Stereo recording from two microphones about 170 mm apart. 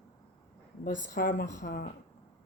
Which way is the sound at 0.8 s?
50° left (ahead or behind).